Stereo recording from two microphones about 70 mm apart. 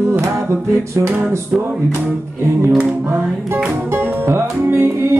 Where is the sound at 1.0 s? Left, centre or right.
Right.